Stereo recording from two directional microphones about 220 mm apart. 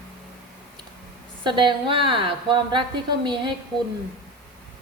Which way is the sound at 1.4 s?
20° right (ahead or behind).